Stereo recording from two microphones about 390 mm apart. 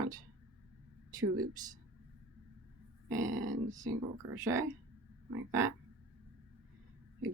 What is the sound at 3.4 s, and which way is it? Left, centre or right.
Speech, centre.